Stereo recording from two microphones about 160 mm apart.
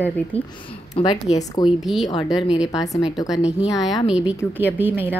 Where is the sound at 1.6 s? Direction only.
25° left (ahead or behind).